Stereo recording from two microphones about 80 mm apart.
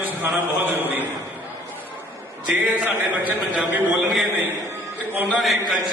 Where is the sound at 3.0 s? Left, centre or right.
Right.